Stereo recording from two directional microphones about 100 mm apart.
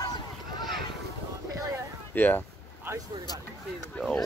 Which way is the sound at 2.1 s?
20° left (ahead or behind).